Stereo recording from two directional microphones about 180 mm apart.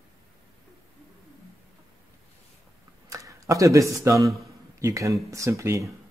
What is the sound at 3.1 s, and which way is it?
Speech, 20° right (ahead or behind).